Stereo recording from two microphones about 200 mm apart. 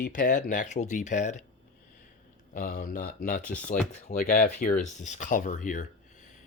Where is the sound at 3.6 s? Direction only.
40° left (ahead or behind).